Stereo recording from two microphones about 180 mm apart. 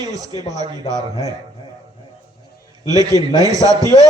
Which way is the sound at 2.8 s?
20° right (ahead or behind).